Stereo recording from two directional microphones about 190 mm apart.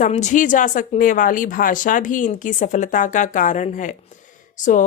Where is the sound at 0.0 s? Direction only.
40° left (ahead or behind).